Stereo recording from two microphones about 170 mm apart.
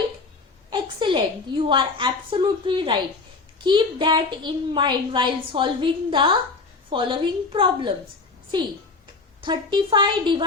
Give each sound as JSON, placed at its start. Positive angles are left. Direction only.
{"t": 0.7, "sound": "a woman's voice", "side_deg": -30}
{"t": 9.4, "sound": "a woman's voice", "side_deg": -30}